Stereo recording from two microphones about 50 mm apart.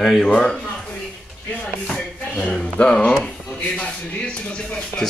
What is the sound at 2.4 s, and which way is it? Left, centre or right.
Speech, centre.